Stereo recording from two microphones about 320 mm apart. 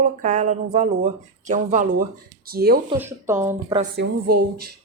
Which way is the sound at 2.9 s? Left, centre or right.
Centre.